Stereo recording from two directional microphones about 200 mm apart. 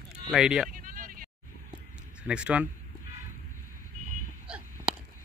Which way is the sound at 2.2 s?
5° right (ahead or behind).